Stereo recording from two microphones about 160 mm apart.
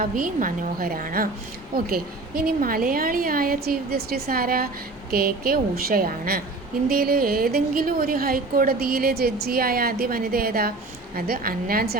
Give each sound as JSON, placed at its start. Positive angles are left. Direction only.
{"t": 0.0, "sound": "a woman's voice", "side_deg": -55}